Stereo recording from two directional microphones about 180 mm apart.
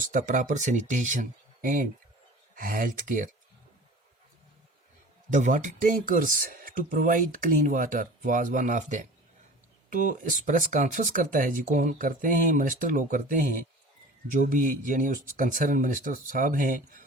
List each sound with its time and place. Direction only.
0.1 s speech: 45° right (ahead or behind)
5.3 s speech: 45° right (ahead or behind)